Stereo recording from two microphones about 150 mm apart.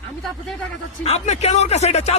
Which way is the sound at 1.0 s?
50° left (ahead or behind).